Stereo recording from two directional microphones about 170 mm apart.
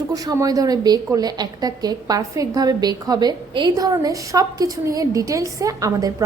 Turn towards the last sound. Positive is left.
turn(degrees=-20)  # may be behind; listen again after turning